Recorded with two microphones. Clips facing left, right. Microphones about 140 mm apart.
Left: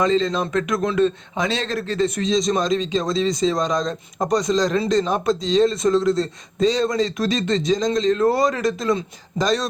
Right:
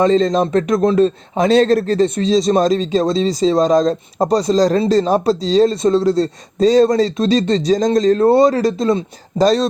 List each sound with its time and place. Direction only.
0.0 s speech: 40° right (ahead or behind)
2.0 s speech: 30° right (ahead or behind)
6.7 s speech: 40° right (ahead or behind)
8.2 s speech: 25° right (ahead or behind)